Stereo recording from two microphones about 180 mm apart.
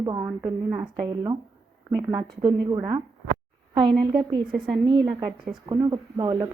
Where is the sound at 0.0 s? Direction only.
20° right (ahead or behind).